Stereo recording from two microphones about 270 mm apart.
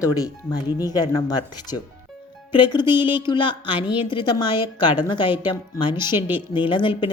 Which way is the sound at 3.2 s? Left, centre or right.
Centre.